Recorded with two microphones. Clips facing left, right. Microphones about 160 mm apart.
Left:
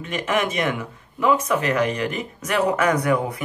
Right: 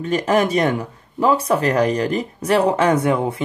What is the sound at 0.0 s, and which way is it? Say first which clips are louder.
Speech: right 6 dB; 35° right (ahead or behind).